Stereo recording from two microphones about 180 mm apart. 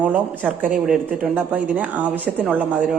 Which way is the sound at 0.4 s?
10° right (ahead or behind).